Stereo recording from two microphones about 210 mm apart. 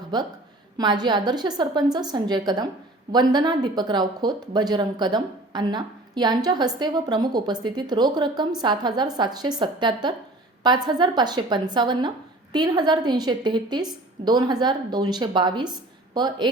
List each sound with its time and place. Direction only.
0.1 s speech: 20° right (ahead or behind)